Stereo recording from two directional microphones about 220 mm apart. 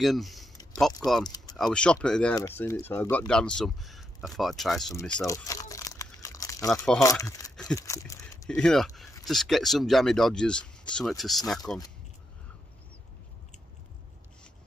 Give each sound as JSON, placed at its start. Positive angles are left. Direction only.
{"t": 0.0, "sound": "speech", "side_deg": 0}
{"t": 1.2, "sound": "speech", "side_deg": 15}
{"t": 1.6, "sound": "speech", "side_deg": 5}
{"t": 5.0, "sound": "crumpling", "side_deg": 10}
{"t": 7.0, "sound": "speech", "side_deg": 15}
{"t": 7.7, "sound": "a sound", "side_deg": 15}
{"t": 8.5, "sound": "speech", "side_deg": 5}